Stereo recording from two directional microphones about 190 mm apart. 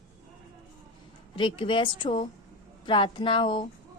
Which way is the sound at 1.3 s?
25° left (ahead or behind).